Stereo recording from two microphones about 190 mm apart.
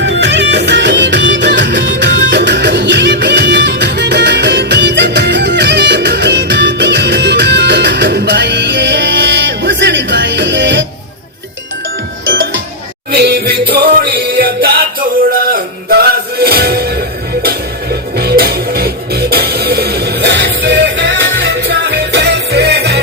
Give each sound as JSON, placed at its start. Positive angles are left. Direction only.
{"t": 0.0, "sound": "music", "side_deg": -70}
{"t": 12.3, "sound": "music", "side_deg": -75}
{"t": 13.1, "sound": "music", "side_deg": -60}
{"t": 18.2, "sound": "music", "side_deg": -55}